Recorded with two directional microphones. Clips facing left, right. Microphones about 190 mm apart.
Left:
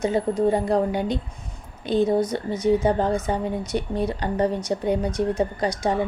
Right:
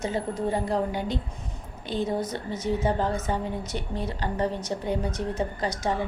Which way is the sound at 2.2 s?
15° left (ahead or behind).